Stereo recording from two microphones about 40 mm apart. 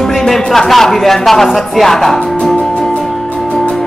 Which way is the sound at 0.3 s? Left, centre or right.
Centre.